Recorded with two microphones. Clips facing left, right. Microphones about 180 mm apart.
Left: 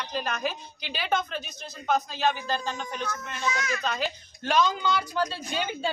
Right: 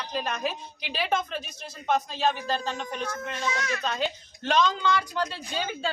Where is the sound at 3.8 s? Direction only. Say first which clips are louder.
Right 1 dB; centre (ahead or behind); by 5.9 s 15° left (ahead or behind).